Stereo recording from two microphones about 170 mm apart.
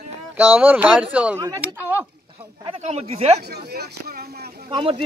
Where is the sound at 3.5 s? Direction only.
70° right (ahead or behind).